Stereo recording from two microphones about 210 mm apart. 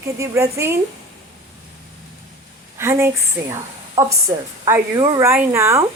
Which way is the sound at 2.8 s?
10° right (ahead or behind).